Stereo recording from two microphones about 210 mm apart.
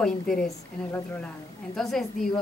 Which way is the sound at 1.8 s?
Centre (ahead or behind).